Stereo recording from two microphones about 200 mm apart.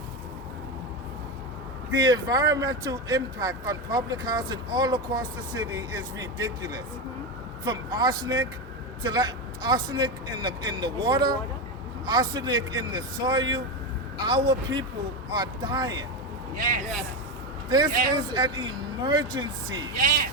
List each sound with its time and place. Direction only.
2.0 s speech: 20° right (ahead or behind)
16.6 s speech: 45° right (ahead or behind)
17.7 s speech: 20° right (ahead or behind)
19.9 s speech: 45° right (ahead or behind)